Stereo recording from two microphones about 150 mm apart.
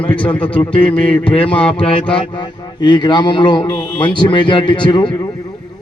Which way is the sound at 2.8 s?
30° left (ahead or behind).